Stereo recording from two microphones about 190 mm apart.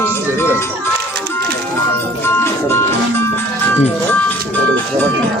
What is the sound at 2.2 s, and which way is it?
Music, 15° left (ahead or behind).